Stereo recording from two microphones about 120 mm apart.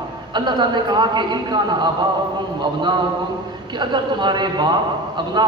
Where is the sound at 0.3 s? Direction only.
40° right (ahead or behind).